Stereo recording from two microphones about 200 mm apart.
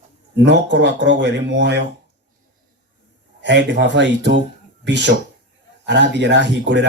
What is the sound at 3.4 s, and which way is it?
Speech, 60° right (ahead or behind).